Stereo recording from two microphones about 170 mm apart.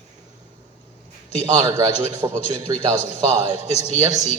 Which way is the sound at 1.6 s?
20° right (ahead or behind).